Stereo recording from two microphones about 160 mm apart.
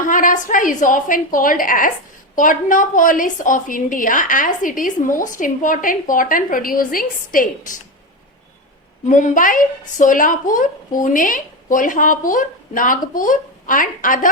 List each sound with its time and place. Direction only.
0.0 s a woman's voice: 55° left (ahead or behind)
9.0 s a woman's voice: 50° left (ahead or behind)